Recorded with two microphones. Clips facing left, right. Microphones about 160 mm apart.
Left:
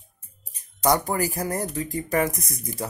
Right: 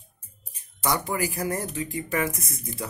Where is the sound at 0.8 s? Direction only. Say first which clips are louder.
Left 4 dB; 40° left (ahead or behind).